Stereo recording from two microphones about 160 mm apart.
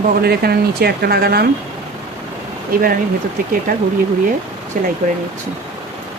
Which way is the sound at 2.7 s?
65° right (ahead or behind).